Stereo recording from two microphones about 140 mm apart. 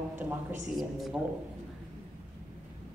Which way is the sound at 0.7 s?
Centre (ahead or behind).